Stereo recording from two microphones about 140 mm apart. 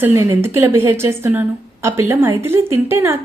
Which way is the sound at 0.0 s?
20° right (ahead or behind).